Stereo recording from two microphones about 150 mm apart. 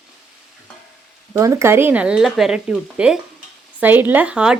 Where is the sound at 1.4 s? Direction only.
20° right (ahead or behind).